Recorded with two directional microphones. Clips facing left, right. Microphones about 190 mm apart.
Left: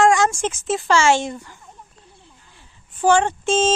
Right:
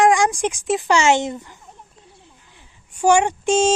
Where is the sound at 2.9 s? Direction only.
15° right (ahead or behind).